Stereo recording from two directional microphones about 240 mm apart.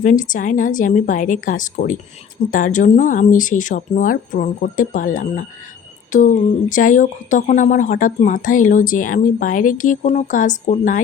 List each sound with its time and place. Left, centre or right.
0.0 s speech: left